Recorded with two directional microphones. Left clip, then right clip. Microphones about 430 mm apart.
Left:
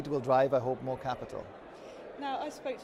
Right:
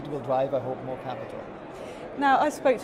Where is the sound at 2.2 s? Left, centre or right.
Right.